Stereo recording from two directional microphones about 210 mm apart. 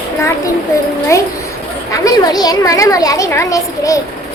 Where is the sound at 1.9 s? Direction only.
15° left (ahead or behind).